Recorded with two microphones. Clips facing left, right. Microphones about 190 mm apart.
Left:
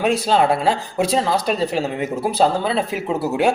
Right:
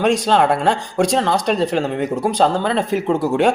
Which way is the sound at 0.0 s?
5° left (ahead or behind).